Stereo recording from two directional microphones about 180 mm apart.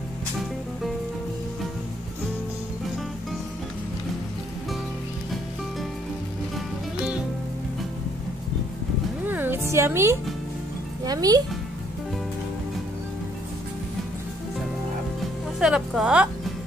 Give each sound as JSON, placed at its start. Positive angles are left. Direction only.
{"t": 9.2, "sound": "music", "side_deg": -10}
{"t": 11.1, "sound": "speech", "side_deg": -20}
{"t": 15.6, "sound": "speech", "side_deg": -5}